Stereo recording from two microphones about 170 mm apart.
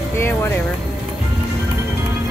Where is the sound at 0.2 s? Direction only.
15° left (ahead or behind).